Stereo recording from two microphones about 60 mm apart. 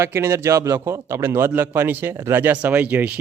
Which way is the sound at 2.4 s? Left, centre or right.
Right.